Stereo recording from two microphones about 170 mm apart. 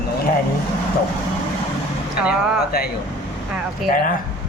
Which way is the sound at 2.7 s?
65° left (ahead or behind).